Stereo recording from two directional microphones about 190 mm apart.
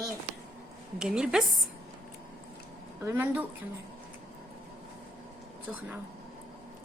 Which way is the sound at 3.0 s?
15° right (ahead or behind).